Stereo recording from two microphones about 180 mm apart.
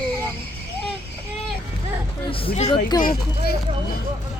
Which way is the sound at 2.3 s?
30° left (ahead or behind).